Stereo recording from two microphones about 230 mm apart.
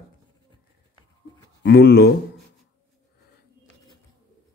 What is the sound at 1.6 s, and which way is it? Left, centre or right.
Speech, left.